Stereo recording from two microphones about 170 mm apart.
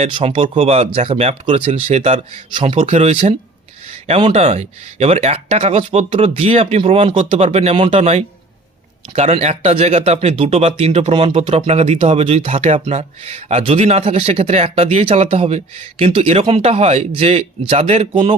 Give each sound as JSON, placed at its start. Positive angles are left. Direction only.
{"t": 0.0, "sound": "speech", "side_deg": -35}